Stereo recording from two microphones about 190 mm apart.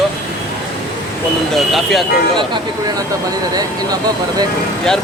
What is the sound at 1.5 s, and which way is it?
Speech, centre (ahead or behind).